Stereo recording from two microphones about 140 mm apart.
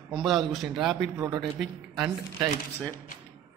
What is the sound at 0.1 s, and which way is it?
A man's voice, centre (ahead or behind).